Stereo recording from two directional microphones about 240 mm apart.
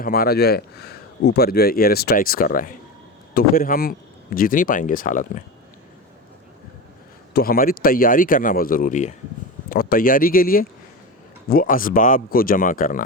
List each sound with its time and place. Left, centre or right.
0.0 s speech: left
7.3 s speech: left